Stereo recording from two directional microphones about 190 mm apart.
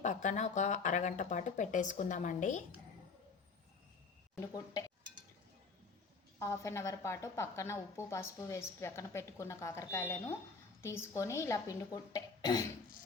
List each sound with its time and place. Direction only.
0.0 s speech: 40° left (ahead or behind)
4.4 s speech: 20° left (ahead or behind)
6.4 s a woman's voice: 15° left (ahead or behind)